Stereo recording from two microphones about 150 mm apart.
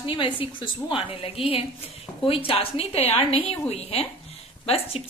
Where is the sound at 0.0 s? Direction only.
35° left (ahead or behind).